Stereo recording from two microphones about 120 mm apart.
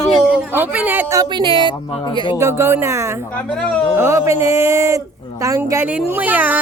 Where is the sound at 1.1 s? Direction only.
30° right (ahead or behind).